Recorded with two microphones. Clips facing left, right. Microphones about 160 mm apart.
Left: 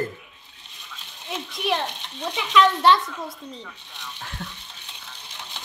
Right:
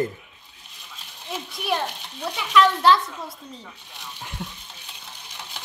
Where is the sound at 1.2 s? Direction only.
5° right (ahead or behind).